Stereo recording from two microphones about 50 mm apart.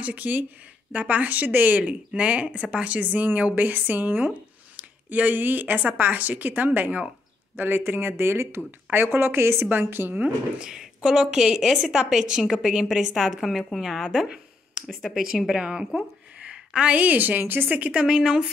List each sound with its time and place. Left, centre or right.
0.0 s speech: right
9.7 s speech: right
10.6 s a woman's voice: centre
14.2 s a sound: right
15.0 s a woman's voice: centre
15.5 s a woman's voice: centre; by 17.6 s right
17.6 s speech: right
18.0 s a woman's voice: centre